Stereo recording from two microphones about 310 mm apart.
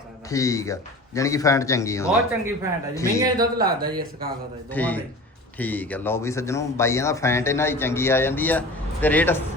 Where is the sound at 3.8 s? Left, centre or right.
Right.